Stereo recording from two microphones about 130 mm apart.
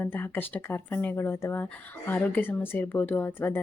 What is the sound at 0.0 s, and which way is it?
A woman's voice, 15° left (ahead or behind).